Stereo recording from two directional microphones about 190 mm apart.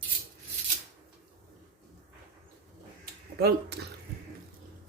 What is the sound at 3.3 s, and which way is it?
Speech, 60° right (ahead or behind).